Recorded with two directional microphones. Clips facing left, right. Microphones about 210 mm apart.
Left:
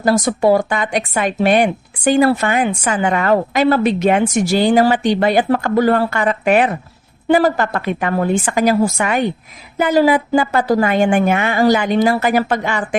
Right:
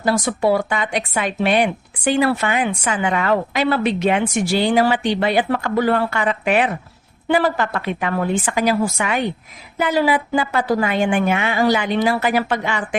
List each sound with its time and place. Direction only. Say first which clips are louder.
0.0 s speech: left 4 dB; 45° left (ahead or behind)